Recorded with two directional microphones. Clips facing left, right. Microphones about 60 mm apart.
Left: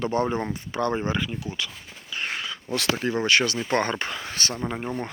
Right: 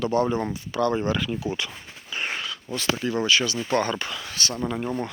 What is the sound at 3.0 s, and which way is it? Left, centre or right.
Speech, left.